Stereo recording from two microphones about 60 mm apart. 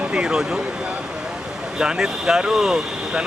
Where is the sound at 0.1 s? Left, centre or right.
Centre.